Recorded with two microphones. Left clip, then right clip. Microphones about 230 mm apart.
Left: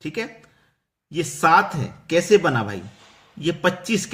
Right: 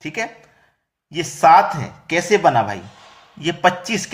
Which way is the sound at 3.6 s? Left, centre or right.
Centre.